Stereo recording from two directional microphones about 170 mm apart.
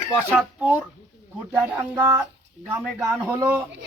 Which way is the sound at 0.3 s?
10° right (ahead or behind).